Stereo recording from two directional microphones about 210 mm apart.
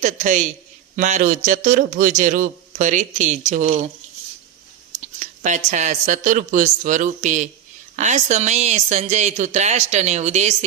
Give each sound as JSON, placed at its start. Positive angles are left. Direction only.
{"t": 0.0, "sound": "a man's voice", "side_deg": -35}
{"t": 4.9, "sound": "a man's voice", "side_deg": -35}